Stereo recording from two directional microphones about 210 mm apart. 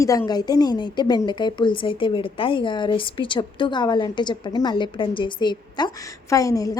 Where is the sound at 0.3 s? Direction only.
20° left (ahead or behind).